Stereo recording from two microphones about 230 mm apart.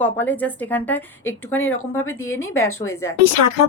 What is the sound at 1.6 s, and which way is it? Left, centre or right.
Speech, left.